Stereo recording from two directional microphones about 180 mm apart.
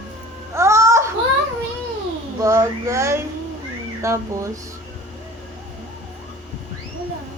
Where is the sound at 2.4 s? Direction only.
15° right (ahead or behind).